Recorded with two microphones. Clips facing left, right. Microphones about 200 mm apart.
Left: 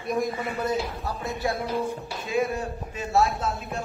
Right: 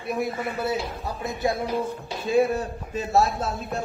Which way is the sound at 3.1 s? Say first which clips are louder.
Right 1 dB; 40° right (ahead or behind).